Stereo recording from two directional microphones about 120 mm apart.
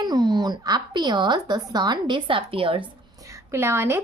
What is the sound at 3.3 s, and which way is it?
Speech, 25° right (ahead or behind).